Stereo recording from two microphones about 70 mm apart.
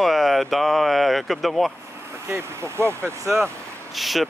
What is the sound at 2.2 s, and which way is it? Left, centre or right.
Speech, right.